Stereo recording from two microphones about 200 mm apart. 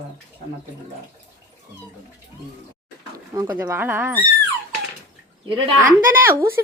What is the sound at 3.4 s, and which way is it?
Speech, 10° right (ahead or behind).